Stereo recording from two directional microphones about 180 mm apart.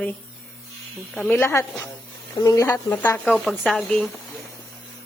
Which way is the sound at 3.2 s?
Centre (ahead or behind).